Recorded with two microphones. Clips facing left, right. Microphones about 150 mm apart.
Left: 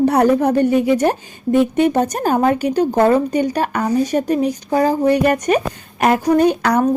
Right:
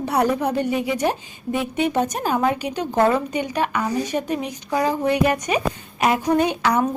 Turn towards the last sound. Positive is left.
turn(degrees=40)  # may be behind; listen again after turning